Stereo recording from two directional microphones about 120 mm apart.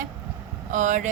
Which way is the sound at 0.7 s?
90° right.